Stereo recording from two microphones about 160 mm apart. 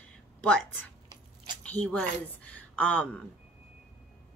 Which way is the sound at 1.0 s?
30° right (ahead or behind).